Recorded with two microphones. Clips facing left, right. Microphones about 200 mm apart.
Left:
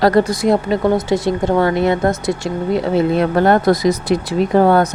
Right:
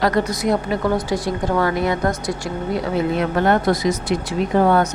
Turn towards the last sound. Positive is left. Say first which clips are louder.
# left 4 dB
turn(degrees=40)  # may be behind; listen again after turning